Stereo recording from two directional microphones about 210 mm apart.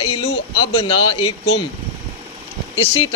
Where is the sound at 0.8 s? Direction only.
25° left (ahead or behind).